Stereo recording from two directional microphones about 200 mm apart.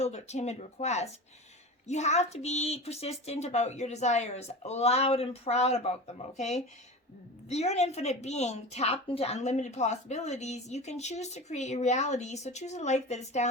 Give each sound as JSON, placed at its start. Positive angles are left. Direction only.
{"t": 0.0, "sound": "a woman's voice", "side_deg": 35}